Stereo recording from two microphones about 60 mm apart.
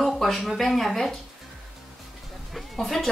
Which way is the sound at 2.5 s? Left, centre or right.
Centre.